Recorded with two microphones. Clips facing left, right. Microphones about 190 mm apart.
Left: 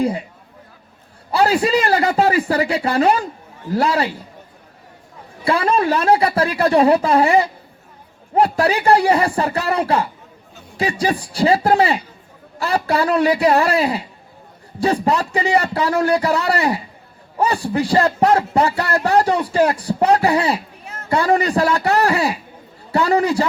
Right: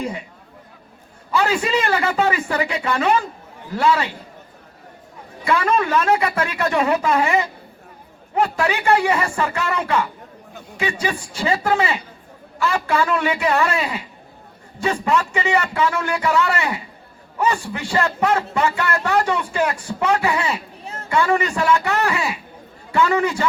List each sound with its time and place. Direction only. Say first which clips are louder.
0.0 s speech: left 7 dB; 35° left (ahead or behind)
1.3 s speech: left 4 dB; 35° left (ahead or behind)
5.5 s speech: left 2 dB; 35° left (ahead or behind)
20.8 s chatter: right 2 dB; 30° right (ahead or behind)
21.1 s speech: left 3 dB; 35° left (ahead or behind)